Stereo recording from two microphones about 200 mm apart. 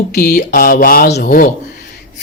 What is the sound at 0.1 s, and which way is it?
Speech, 50° left (ahead or behind).